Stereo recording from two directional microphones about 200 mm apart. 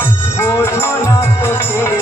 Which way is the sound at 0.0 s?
10° left (ahead or behind).